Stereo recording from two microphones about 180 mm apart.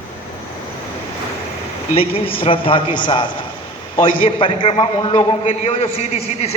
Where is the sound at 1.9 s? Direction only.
30° left (ahead or behind).